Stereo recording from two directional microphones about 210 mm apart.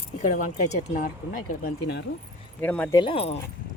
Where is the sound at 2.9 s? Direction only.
25° left (ahead or behind).